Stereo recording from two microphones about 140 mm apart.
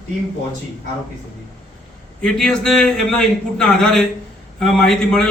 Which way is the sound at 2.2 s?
5° left (ahead or behind).